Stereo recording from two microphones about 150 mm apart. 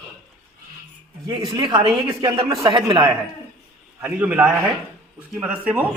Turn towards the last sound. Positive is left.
turn(degrees=-10)  # may be behind; listen again after turning